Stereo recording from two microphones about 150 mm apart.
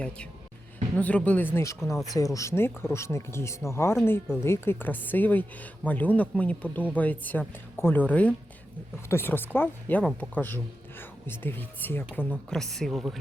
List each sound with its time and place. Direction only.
0.9 s speech: 10° left (ahead or behind)